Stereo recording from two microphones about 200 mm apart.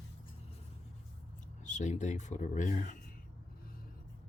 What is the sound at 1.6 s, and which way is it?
Speech, 35° left (ahead or behind).